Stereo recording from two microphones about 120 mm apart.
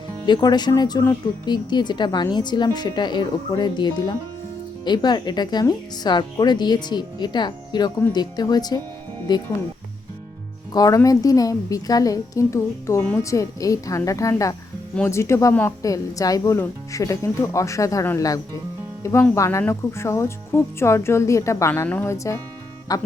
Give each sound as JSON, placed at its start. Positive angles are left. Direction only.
{"t": 0.3, "sound": "a woman's voice", "side_deg": 35}
{"t": 10.7, "sound": "speech", "side_deg": 30}
{"t": 19.3, "sound": "speech", "side_deg": 25}
{"t": 21.8, "sound": "speech", "side_deg": 15}
{"t": 22.1, "sound": "a woman's voice", "side_deg": 25}